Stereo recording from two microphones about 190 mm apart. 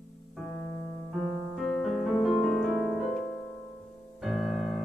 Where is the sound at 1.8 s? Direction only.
Centre (ahead or behind).